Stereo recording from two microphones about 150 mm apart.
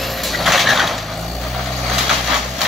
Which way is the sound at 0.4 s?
Centre (ahead or behind).